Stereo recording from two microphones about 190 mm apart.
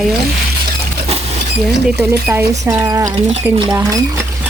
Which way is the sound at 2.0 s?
10° right (ahead or behind).